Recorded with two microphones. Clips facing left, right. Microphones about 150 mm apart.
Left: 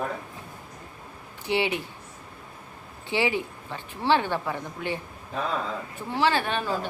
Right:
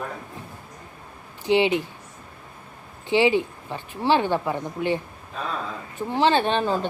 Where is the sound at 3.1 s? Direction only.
20° right (ahead or behind).